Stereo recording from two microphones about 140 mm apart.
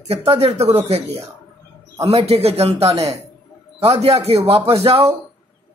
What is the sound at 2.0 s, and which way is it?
Speech, 45° right (ahead or behind).